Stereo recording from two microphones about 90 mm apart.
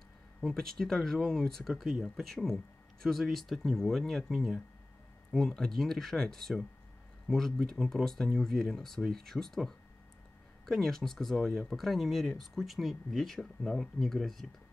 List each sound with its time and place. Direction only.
0.4 s speech: 5° left (ahead or behind)